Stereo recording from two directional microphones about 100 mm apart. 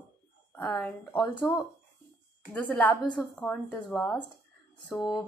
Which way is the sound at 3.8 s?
5° left (ahead or behind).